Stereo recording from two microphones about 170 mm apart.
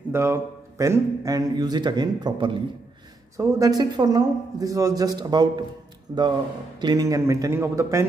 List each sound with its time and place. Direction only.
0.1 s a man's voice: 15° right (ahead or behind)